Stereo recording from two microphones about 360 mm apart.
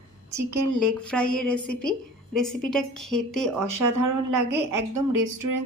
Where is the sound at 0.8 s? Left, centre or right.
Centre.